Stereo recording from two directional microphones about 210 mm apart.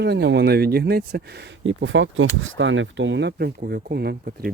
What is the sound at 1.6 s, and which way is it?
Speech, 65° right (ahead or behind).